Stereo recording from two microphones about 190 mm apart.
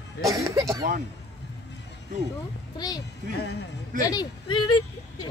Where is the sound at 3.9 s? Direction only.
45° right (ahead or behind).